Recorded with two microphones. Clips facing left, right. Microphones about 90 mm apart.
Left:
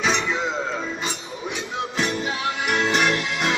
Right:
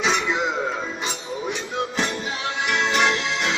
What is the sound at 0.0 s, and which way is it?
Music, 15° right (ahead or behind).